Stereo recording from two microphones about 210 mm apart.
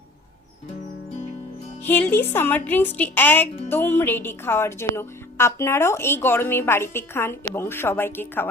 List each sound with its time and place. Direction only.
1.8 s speech: 10° left (ahead or behind)